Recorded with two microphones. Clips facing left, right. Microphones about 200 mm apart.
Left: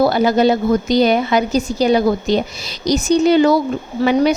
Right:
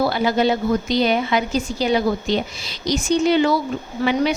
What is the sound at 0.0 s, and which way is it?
A woman's voice, 45° left (ahead or behind).